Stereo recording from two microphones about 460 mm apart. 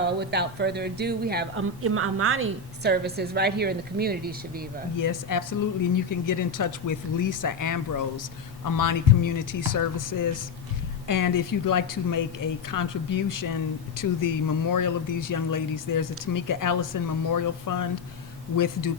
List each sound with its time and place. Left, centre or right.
0.2 s speech: right
4.9 s speech: left